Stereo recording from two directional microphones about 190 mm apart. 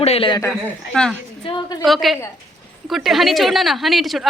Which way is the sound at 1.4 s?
25° left (ahead or behind).